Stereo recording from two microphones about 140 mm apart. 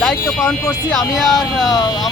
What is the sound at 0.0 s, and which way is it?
Speech, 5° left (ahead or behind).